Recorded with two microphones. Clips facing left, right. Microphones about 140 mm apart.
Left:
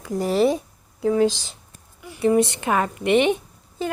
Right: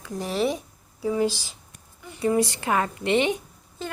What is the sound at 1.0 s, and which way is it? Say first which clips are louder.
Speech: left 5 dB; 70° left (ahead or behind).